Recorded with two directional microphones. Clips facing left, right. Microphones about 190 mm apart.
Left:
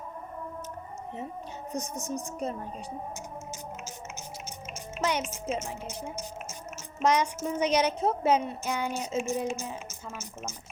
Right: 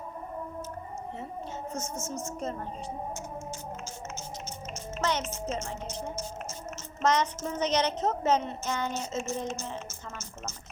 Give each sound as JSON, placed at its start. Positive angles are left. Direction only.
{"t": 1.7, "sound": "a woman's voice", "side_deg": 15}
{"t": 4.9, "sound": "a woman's voice", "side_deg": 10}